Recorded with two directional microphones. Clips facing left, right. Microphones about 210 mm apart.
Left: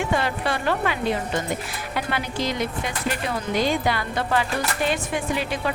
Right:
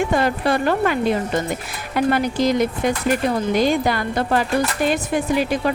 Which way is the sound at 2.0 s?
45° right (ahead or behind).